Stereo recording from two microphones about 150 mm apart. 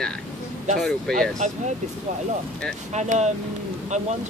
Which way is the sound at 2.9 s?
50° right (ahead or behind).